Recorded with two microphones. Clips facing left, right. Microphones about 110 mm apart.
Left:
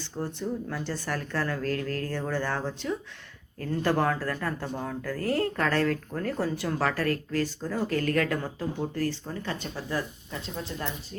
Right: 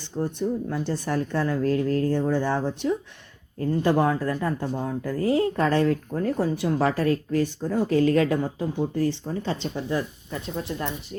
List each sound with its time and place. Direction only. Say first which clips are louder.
0.2 s speech: right 6 dB; 20° right (ahead or behind)